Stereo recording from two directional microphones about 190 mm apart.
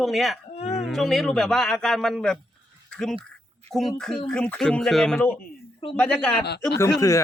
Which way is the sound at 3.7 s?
Centre (ahead or behind).